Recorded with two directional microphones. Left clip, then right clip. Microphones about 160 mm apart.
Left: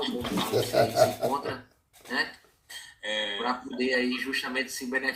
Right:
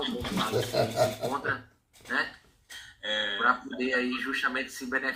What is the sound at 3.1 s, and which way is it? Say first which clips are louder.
Speech: right 3 dB; 30° left (ahead or behind).